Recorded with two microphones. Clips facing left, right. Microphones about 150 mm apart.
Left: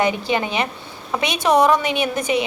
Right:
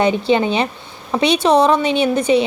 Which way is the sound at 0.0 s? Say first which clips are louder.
Right 5 dB; 25° right (ahead or behind).